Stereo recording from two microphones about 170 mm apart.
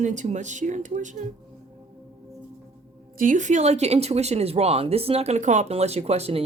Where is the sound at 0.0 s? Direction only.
45° right (ahead or behind).